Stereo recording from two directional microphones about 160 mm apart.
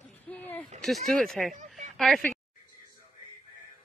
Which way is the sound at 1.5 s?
50° right (ahead or behind).